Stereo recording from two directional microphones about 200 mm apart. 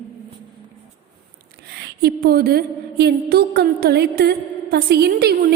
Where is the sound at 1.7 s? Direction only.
50° right (ahead or behind).